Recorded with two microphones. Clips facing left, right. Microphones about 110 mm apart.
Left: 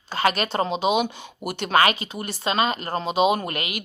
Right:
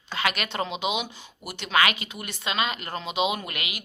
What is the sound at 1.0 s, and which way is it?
Speech, 50° left (ahead or behind).